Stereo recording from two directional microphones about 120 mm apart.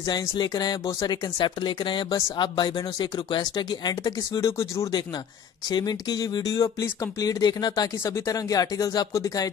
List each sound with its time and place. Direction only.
0.4 s speech: 35° left (ahead or behind)
4.5 s speech: 25° left (ahead or behind)
5.7 s speech: 35° left (ahead or behind)